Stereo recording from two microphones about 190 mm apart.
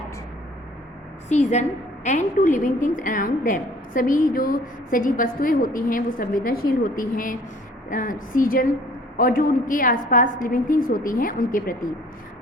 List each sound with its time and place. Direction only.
1.3 s a woman's voice: 35° left (ahead or behind)